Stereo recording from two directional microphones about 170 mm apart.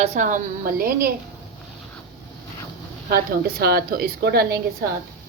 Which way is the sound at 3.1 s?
65° right (ahead or behind).